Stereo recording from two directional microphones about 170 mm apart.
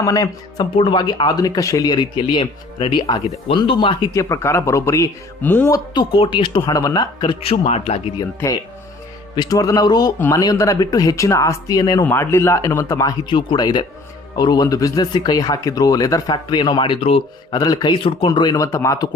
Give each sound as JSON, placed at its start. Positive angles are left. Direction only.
{"t": 0.0, "sound": "speech", "side_deg": 20}
{"t": 9.3, "sound": "speech", "side_deg": 25}